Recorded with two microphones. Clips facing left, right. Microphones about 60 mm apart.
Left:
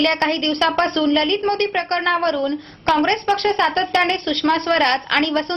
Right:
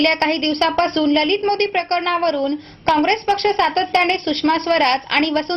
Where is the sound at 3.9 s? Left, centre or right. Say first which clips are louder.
Right 1 dB; right.